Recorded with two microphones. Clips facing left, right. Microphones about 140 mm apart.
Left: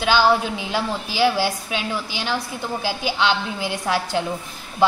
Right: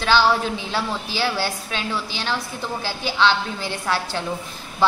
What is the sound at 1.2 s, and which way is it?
Speech, 15° left (ahead or behind).